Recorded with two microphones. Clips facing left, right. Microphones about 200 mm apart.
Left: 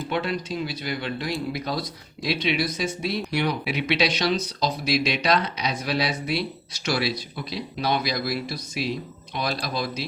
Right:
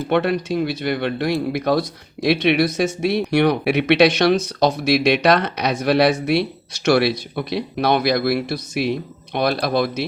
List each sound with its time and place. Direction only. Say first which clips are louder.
0.1 s speech: right 9 dB; 60° right (ahead or behind)